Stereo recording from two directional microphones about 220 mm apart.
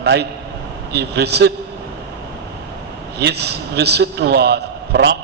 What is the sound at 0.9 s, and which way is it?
Speech, 50° right (ahead or behind).